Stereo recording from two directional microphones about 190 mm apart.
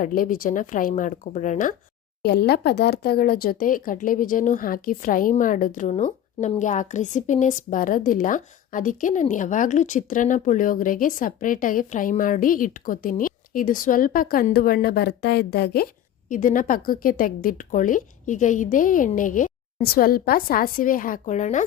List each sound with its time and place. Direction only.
0.0 s speech: 45° left (ahead or behind)
2.2 s speech: 60° left (ahead or behind)
16.3 s speech: 45° left (ahead or behind)